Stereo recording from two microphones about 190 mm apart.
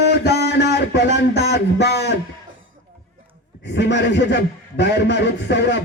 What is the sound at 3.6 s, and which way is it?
A man's voice, 70° left (ahead or behind).